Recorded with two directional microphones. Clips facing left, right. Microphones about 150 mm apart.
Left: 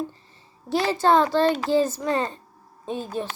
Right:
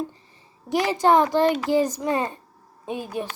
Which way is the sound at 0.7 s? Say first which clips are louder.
Right 1 dB; 15° right (ahead or behind).